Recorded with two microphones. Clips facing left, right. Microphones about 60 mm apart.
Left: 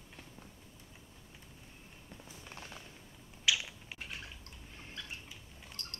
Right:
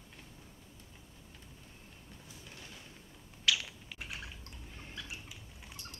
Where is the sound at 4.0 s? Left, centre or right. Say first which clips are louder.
Right 2 dB; centre.